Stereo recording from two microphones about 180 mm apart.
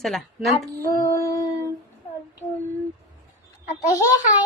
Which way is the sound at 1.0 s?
15° left (ahead or behind).